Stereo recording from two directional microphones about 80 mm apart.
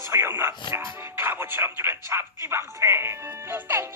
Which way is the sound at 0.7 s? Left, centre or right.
Right.